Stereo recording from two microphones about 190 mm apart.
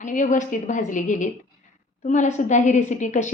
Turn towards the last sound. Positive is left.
turn(degrees=40)  # may be behind; listen again after turning